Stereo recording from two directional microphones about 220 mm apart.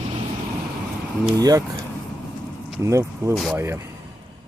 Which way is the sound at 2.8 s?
15° right (ahead or behind).